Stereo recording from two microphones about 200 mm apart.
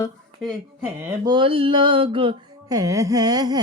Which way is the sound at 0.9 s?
15° right (ahead or behind).